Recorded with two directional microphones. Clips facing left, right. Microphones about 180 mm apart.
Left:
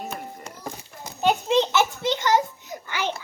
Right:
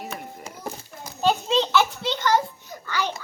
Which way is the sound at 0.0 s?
Centre (ahead or behind).